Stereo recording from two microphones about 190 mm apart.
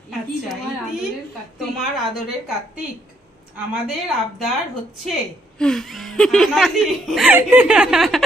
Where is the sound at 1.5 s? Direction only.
Centre (ahead or behind).